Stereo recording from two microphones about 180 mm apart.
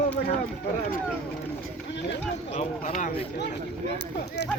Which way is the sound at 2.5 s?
45° left (ahead or behind).